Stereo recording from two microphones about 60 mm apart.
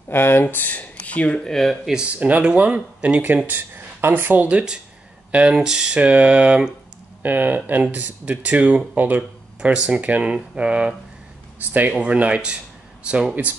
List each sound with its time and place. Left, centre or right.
0.1 s speech: left; by 1.5 s centre
1.5 s speech: centre
2.0 s speech: right
4.5 s speech: centre
5.9 s speech: right
7.2 s speech: right